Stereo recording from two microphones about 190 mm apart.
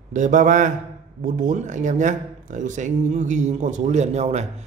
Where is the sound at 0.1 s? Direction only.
40° right (ahead or behind).